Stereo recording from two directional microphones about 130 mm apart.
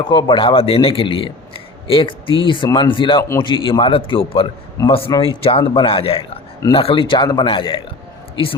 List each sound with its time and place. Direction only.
0.0 s a man's voice: 35° left (ahead or behind)